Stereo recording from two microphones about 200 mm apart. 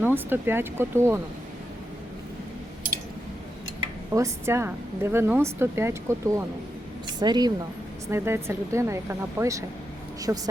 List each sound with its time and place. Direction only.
0.0 s speech: 10° right (ahead or behind)
4.1 s a woman's voice: 15° right (ahead or behind)